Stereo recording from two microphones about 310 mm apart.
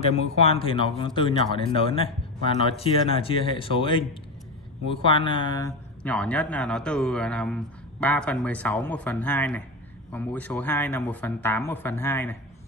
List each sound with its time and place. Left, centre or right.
0.4 s speech: centre